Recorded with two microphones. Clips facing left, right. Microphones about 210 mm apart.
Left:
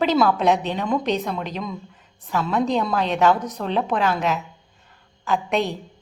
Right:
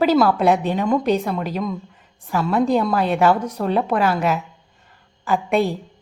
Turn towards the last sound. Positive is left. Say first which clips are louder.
# right 3 dB
turn(degrees=-10)  # may be behind; listen again after turning